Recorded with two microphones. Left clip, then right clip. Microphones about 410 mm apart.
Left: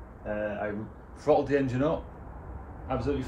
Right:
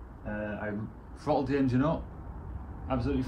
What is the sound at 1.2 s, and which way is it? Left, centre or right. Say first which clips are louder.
A man's voice: left 4 dB; centre.